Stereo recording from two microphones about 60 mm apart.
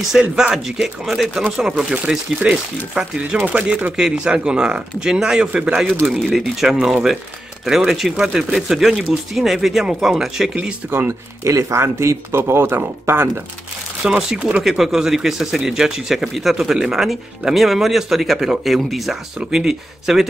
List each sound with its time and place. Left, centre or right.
0.0 s speech: centre
6.0 s speech: centre
10.9 s speech: right
11.4 s speech: right
14.0 s speech: centre
14.6 s speech: centre